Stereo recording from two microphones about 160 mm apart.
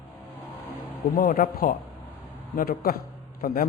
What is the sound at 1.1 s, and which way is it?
A man's voice, 60° left (ahead or behind).